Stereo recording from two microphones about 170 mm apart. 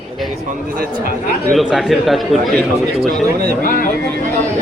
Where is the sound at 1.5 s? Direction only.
Centre (ahead or behind).